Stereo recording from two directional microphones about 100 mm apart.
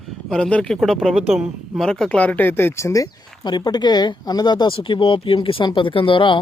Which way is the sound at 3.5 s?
45° left (ahead or behind).